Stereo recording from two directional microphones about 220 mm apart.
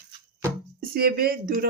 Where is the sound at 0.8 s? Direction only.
40° right (ahead or behind).